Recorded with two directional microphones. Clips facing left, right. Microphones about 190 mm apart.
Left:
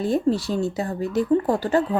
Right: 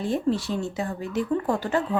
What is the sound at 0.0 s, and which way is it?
A woman's voice, 40° left (ahead or behind).